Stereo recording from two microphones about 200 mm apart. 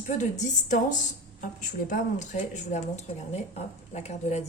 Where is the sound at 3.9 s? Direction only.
35° left (ahead or behind).